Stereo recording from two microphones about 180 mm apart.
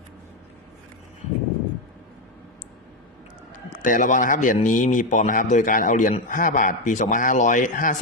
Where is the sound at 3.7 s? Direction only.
45° left (ahead or behind).